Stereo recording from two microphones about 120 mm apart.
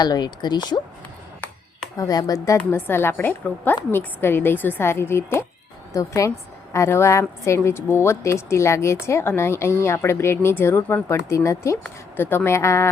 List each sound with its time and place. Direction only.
0.0 s speech: 35° left (ahead or behind)
2.0 s speech: 30° left (ahead or behind)
2.6 s speech: 15° left (ahead or behind)